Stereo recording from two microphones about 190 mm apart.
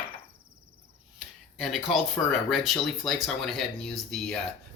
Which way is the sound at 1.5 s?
Centre (ahead or behind).